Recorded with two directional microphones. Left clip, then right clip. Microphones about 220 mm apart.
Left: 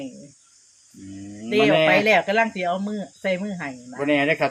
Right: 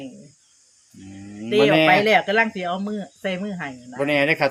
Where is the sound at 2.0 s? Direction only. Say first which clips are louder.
Right 1 dB; centre (ahead or behind).